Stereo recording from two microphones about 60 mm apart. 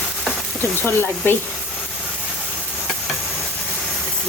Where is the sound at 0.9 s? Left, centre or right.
Left.